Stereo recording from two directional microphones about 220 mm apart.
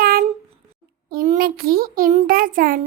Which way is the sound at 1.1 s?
40° right (ahead or behind).